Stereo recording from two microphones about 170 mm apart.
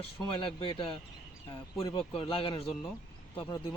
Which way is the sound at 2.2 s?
30° left (ahead or behind).